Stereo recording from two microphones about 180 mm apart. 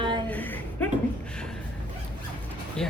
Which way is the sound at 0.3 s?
10° left (ahead or behind).